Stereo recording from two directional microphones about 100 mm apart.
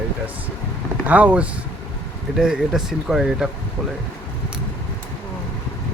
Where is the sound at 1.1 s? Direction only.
15° right (ahead or behind).